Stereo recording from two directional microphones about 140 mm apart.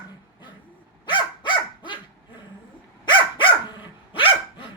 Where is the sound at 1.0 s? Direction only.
35° left (ahead or behind).